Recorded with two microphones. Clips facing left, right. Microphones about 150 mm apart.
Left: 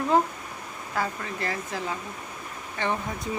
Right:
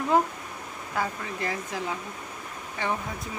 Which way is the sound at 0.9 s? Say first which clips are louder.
Left 1 dB; 15° right (ahead or behind).